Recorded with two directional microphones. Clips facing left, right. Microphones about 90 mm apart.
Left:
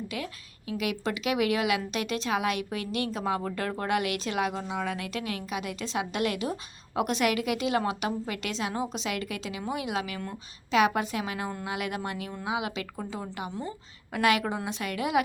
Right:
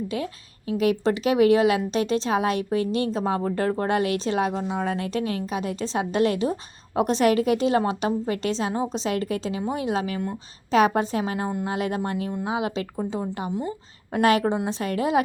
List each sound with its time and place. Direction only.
0.1 s speech: 30° right (ahead or behind)